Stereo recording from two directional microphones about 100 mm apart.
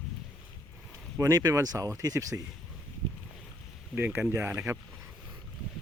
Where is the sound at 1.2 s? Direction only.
40° right (ahead or behind).